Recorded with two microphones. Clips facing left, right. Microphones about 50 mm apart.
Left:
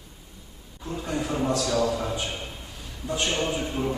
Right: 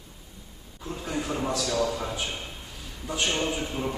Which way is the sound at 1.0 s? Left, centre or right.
Centre.